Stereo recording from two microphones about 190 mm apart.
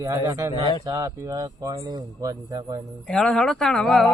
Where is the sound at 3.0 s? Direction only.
5° left (ahead or behind).